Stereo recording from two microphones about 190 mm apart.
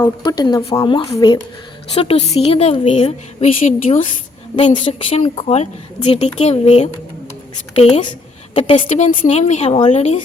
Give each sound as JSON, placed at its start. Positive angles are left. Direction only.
{"t": 0.2, "sound": "a woman's voice", "side_deg": 20}
{"t": 9.0, "sound": "a woman's voice", "side_deg": 35}